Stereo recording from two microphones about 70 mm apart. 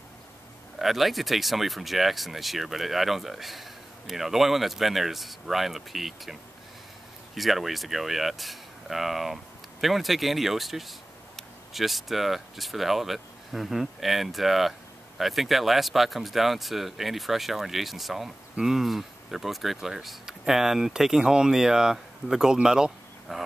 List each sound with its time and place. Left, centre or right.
0.7 s speech: centre
7.3 s speech: centre